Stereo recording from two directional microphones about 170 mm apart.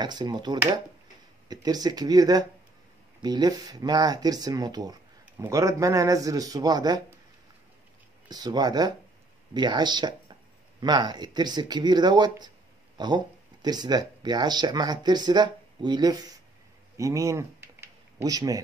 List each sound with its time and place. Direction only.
0.0 s speech: 25° right (ahead or behind)
8.3 s speech: 25° right (ahead or behind)
16.9 s a sound: 20° right (ahead or behind)